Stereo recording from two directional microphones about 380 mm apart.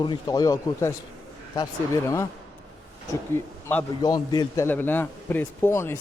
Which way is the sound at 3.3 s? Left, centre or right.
Centre.